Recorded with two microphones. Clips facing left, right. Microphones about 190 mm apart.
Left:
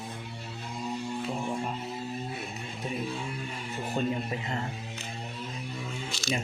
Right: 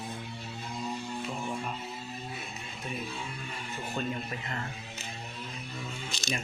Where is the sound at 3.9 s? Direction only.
25° left (ahead or behind).